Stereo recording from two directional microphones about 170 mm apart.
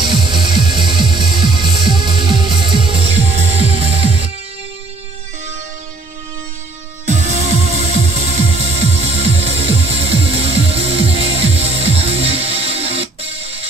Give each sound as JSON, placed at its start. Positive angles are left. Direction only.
{"t": 0.0, "sound": "music", "side_deg": -25}
{"t": 1.2, "sound": "music", "side_deg": 0}
{"t": 1.5, "sound": "music", "side_deg": -25}
{"t": 7.1, "sound": "music", "side_deg": -40}